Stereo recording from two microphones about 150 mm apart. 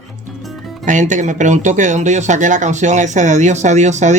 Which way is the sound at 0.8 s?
55° right (ahead or behind).